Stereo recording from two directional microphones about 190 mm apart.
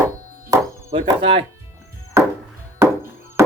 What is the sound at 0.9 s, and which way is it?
Speech, 30° right (ahead or behind).